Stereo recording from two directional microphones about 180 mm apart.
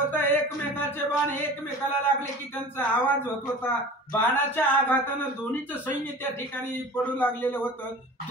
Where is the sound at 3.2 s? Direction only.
10° left (ahead or behind).